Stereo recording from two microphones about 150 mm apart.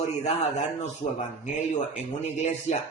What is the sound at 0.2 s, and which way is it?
Speech, 45° left (ahead or behind).